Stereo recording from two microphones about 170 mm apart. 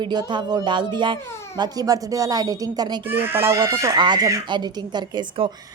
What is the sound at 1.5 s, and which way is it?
Speech, 25° right (ahead or behind).